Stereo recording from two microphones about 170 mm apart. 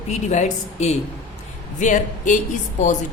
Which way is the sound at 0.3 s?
45° left (ahead or behind).